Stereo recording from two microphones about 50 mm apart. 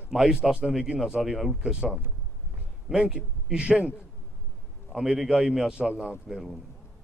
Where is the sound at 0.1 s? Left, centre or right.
Centre.